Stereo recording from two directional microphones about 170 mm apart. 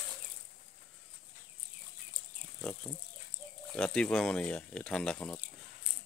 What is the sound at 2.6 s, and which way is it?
Pig, 10° left (ahead or behind).